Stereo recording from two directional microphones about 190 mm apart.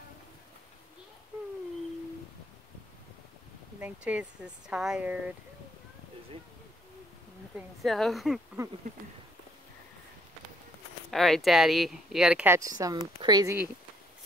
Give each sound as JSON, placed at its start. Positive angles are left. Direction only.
{"t": 3.8, "sound": "speech", "side_deg": -5}
{"t": 7.5, "sound": "speech", "side_deg": 0}
{"t": 11.1, "sound": "speech", "side_deg": 0}